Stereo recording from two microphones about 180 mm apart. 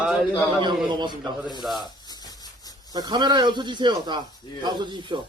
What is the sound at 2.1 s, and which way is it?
Rub, 20° left (ahead or behind).